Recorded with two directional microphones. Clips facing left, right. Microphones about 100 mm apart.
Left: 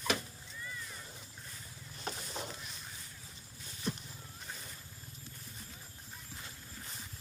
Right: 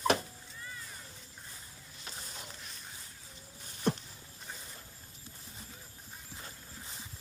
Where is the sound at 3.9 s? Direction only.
65° right (ahead or behind).